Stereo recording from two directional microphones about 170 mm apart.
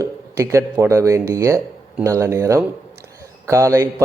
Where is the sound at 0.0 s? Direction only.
20° right (ahead or behind).